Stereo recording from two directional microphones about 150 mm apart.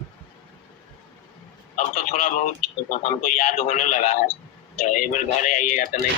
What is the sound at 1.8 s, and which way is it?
A man's voice, 55° left (ahead or behind).